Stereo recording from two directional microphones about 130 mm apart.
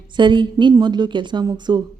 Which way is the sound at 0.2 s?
35° right (ahead or behind).